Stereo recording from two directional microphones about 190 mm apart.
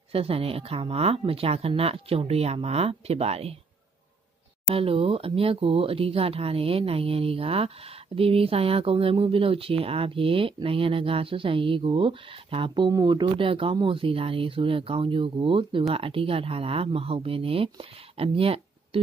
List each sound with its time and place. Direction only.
0.1 s speech: 30° right (ahead or behind)
4.6 s speech: 30° right (ahead or behind)